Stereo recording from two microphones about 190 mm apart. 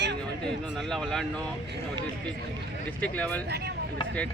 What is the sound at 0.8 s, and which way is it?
Speech, centre (ahead or behind).